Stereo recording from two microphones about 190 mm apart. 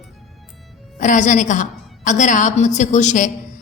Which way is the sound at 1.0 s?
40° left (ahead or behind).